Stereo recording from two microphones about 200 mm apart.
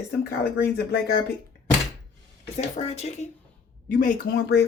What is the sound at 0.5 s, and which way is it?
Speech, 55° left (ahead or behind).